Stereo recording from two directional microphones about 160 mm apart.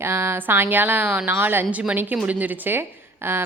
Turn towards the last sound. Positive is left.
turn(degrees=-15)  # may be behind; listen again after turning